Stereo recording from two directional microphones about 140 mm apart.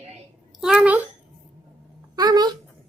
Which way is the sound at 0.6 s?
5° right (ahead or behind).